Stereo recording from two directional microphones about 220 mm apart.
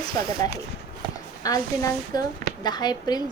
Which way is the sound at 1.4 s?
15° left (ahead or behind).